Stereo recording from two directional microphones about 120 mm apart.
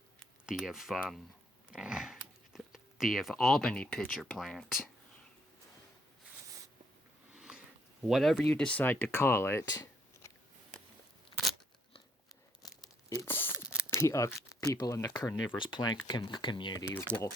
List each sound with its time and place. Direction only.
0.4 s speech: 5° right (ahead or behind)
1.7 s a sound: 5° right (ahead or behind)
4.1 s speech: centre (ahead or behind)
7.3 s sniff: 10° right (ahead or behind)
8.0 s speech: centre (ahead or behind); by 10.3 s 30° left (ahead or behind)
12.6 s tearing: 30° left (ahead or behind)
13.2 s speech: 15° left (ahead or behind)
15.5 s speech: 40° left (ahead or behind)
16.9 s speech: 20° left (ahead or behind)